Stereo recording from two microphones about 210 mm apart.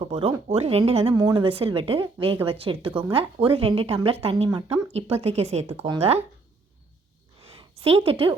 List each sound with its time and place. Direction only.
0.0 s speech: 30° right (ahead or behind)
7.8 s speech: 30° right (ahead or behind)